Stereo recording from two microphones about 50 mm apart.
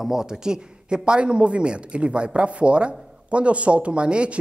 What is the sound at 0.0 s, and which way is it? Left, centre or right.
A man's voice, centre.